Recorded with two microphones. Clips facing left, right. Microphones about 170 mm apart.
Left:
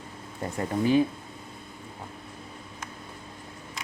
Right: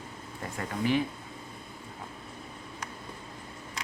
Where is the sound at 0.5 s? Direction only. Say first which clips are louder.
Left 6 dB; 25° left (ahead or behind).